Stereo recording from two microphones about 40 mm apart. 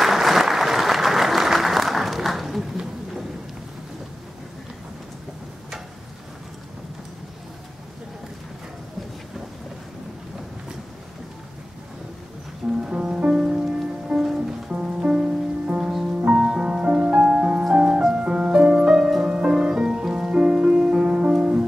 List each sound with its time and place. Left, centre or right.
0.0 s applause: centre
12.6 s music: right
15.8 s music: centre
16.3 s music: right